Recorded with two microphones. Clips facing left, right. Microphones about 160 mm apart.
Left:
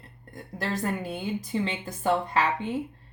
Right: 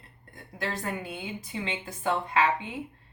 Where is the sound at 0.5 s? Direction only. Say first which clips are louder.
Left 3 dB; 40° left (ahead or behind).